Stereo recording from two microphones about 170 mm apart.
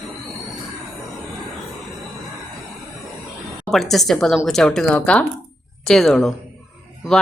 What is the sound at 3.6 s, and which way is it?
A woman's voice, centre (ahead or behind).